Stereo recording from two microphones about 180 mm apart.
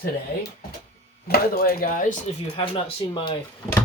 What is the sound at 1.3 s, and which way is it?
Speech, 55° left (ahead or behind).